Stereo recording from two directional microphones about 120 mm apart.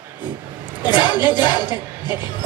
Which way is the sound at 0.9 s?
35° left (ahead or behind).